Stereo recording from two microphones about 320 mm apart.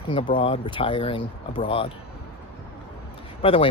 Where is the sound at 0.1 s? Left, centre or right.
Centre.